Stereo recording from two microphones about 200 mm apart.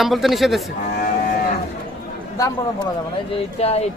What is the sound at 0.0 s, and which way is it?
Speech, centre (ahead or behind).